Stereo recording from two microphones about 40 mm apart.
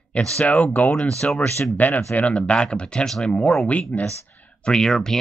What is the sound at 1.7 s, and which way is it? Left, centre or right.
Speech, left.